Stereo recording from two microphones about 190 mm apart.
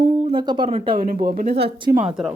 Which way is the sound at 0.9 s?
50° right (ahead or behind).